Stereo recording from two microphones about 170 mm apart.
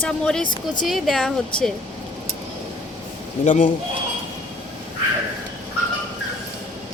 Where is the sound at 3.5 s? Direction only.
50° left (ahead or behind).